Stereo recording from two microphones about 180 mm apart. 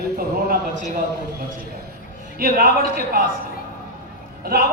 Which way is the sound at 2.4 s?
55° right (ahead or behind).